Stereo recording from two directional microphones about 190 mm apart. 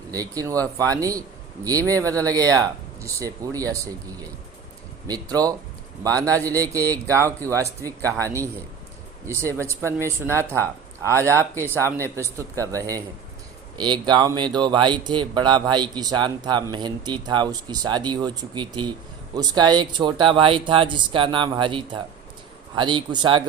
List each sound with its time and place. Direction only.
0.1 s speech: 20° right (ahead or behind)